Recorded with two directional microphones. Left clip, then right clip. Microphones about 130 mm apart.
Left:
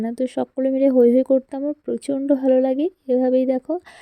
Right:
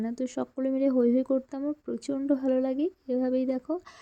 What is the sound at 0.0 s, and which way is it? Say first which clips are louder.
Speech: left 9 dB; 40° left (ahead or behind).